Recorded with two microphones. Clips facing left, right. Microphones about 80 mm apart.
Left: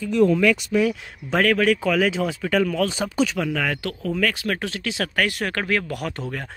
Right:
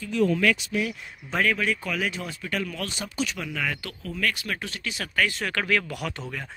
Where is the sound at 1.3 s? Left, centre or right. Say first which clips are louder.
Left 6 dB; left.